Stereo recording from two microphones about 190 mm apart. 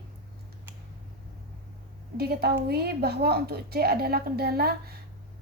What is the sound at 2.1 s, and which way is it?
Speech, 55° right (ahead or behind).